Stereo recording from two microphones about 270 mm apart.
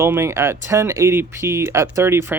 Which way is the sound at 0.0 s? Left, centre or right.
Centre.